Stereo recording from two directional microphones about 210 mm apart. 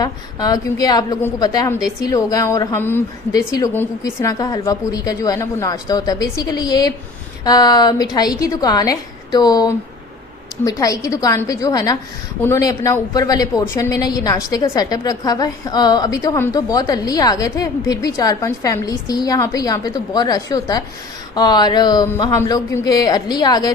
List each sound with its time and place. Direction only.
0.0 s a woman's voice: 20° left (ahead or behind)